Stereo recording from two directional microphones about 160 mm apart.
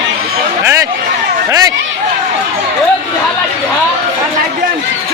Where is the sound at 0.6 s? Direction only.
15° right (ahead or behind).